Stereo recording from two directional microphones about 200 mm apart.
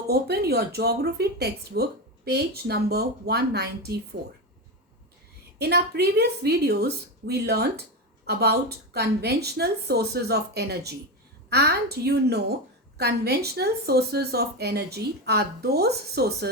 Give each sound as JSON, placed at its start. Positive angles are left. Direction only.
{"t": 0.1, "sound": "speech", "side_deg": -55}
{"t": 5.5, "sound": "speech", "side_deg": -55}